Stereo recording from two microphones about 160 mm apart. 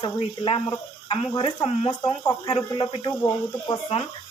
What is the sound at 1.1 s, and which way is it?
A woman's voice, 30° left (ahead or behind).